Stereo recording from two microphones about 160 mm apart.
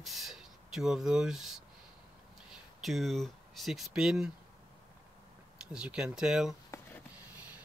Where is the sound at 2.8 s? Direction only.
Centre (ahead or behind).